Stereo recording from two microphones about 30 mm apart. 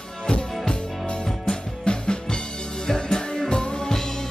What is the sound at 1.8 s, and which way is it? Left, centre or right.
Music, left.